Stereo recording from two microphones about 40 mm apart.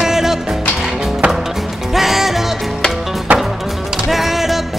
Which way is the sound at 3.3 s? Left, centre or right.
Right.